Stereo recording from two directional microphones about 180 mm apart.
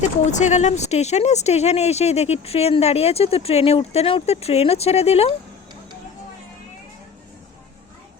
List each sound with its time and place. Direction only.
0.3 s speech: 40° left (ahead or behind)